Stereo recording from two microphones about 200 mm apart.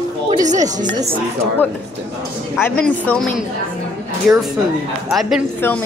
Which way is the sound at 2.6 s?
10° left (ahead or behind).